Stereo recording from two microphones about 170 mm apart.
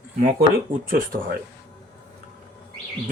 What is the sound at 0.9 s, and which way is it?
Speech, 60° right (ahead or behind).